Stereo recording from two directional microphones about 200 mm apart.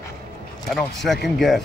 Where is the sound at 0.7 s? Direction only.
Centre (ahead or behind).